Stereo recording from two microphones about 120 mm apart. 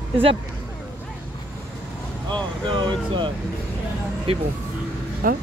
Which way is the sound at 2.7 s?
40° right (ahead or behind).